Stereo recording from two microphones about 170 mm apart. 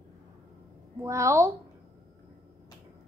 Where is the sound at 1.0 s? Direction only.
15° right (ahead or behind).